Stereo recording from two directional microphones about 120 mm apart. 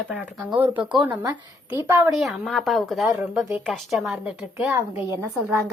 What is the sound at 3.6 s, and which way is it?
A woman's voice, centre (ahead or behind).